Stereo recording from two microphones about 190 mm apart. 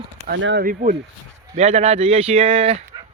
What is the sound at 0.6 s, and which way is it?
Speech, 45° right (ahead or behind).